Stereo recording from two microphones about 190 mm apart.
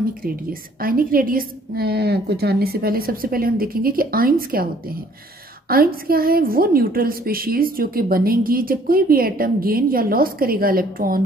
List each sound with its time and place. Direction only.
0.2 s a woman's voice: 50° right (ahead or behind)